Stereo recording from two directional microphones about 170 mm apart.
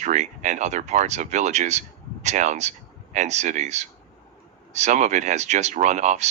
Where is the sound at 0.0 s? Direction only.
45° right (ahead or behind).